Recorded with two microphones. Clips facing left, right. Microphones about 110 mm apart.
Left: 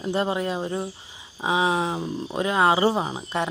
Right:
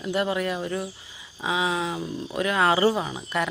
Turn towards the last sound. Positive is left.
turn(degrees=30)  # may be behind; listen again after turning